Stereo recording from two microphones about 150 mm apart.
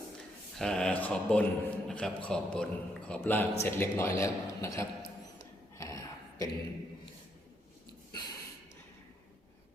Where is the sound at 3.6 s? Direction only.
20° left (ahead or behind).